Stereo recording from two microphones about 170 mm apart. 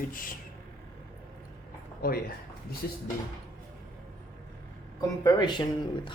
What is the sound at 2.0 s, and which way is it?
Speech, 65° left (ahead or behind).